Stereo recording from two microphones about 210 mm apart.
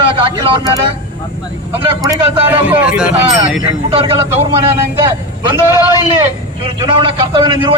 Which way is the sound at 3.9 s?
25° right (ahead or behind).